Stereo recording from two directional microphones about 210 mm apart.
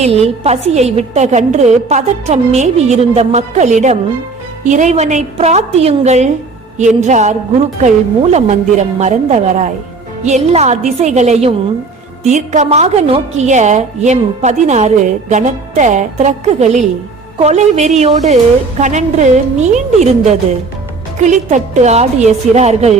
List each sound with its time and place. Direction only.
0.0 s a woman's voice: 30° right (ahead or behind)